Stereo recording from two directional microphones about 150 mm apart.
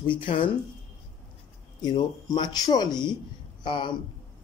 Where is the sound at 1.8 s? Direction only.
30° left (ahead or behind).